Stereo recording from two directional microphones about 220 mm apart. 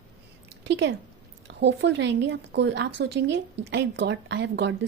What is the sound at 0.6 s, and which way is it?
Speech, 50° right (ahead or behind).